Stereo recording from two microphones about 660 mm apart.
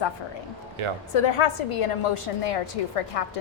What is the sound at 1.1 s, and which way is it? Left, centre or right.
A woman's voice, left.